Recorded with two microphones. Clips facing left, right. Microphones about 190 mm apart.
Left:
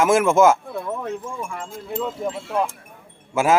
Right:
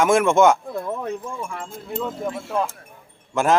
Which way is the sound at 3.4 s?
5° left (ahead or behind).